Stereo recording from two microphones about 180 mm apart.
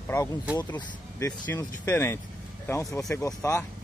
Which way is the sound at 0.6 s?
25° left (ahead or behind).